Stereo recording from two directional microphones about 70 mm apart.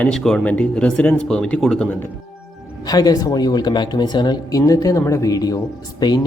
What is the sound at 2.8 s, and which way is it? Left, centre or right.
Speech, left.